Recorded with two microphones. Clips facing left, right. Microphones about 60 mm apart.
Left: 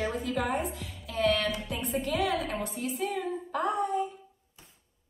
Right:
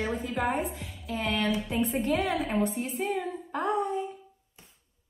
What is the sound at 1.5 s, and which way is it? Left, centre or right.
A woman's voice, right.